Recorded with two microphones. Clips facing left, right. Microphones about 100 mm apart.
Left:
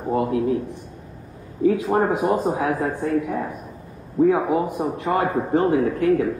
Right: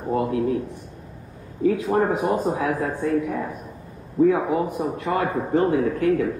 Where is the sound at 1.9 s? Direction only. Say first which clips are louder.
Left 1 dB; 30° left (ahead or behind).